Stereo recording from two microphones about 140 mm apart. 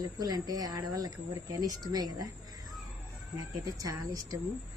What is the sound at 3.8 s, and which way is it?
Speech, 25° right (ahead or behind).